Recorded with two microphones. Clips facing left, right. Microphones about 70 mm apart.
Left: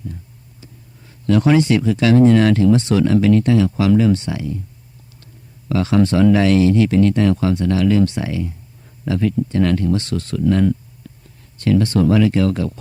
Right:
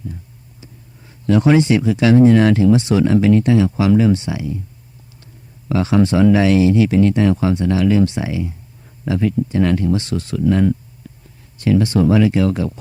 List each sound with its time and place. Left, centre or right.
0.6 s speech: centre
11.1 s a sound: centre
11.5 s speech: centre